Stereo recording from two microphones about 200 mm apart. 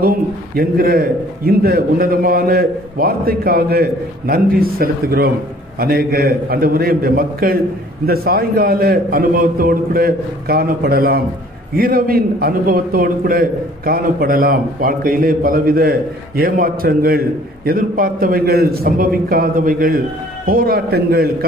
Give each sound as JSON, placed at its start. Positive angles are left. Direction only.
{"t": 0.0, "sound": "a man's voice", "side_deg": -45}